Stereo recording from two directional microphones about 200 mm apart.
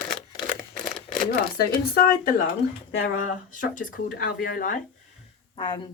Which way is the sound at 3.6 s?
40° left (ahead or behind).